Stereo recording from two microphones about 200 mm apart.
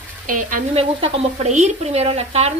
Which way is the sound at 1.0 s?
30° right (ahead or behind).